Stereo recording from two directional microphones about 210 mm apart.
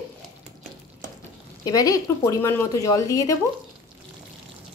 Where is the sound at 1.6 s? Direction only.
15° left (ahead or behind).